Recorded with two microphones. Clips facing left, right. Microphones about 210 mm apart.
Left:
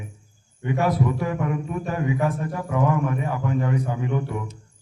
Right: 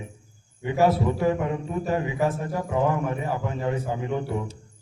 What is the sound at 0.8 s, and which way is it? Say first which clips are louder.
A man's voice: right 3 dB; 25° right (ahead or behind).